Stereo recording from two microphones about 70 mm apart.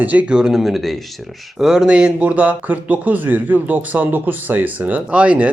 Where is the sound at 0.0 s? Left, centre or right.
Right.